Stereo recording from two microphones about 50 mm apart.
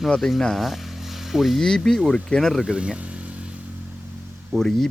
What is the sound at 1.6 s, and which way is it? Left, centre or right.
Speech, centre.